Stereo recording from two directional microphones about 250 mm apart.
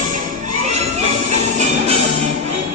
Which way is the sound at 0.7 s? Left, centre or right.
Right.